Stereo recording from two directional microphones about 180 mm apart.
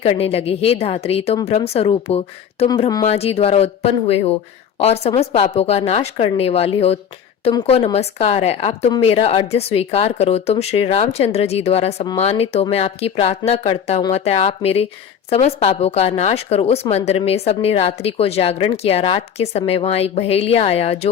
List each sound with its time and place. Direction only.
0.0 s a woman's voice: 35° left (ahead or behind)